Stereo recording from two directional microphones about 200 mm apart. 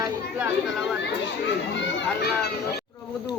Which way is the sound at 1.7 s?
65° left (ahead or behind).